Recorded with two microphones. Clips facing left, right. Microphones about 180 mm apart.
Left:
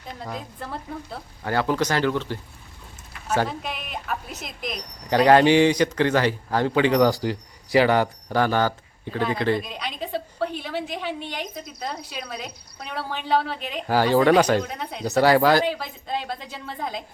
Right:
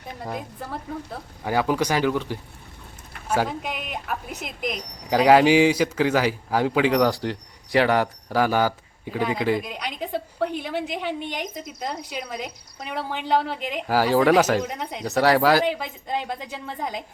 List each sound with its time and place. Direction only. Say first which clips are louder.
1.5 s a man's voice: right 1 dB; 10° right (ahead or behind)
14.6 s speech: right 2 dB; 15° right (ahead or behind)
15.0 s speech: left 1 dB; centre (ahead or behind)
15.6 s a man's voice: right 1 dB; 15° right (ahead or behind)